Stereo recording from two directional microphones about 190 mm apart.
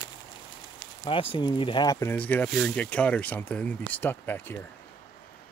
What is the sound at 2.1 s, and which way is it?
Speech, 10° left (ahead or behind).